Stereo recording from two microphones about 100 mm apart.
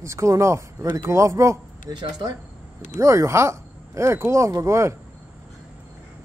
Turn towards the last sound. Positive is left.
turn(degrees=-30)  # may be behind; listen again after turning